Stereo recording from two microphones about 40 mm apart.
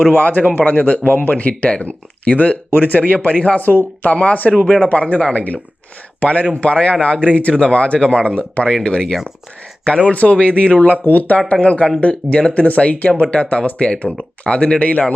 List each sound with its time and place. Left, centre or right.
0.1 s speech: left
1.1 s speech: left
3.2 s speech: left
3.6 s speech: left
4.1 s speech: left
11.0 s speech: left
11.6 s speech: left